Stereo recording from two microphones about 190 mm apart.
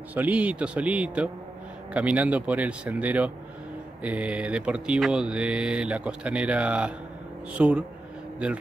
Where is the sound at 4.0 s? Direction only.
5° right (ahead or behind).